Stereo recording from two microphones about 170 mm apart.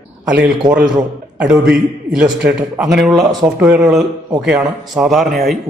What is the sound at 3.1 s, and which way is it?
Speech, 25° right (ahead or behind).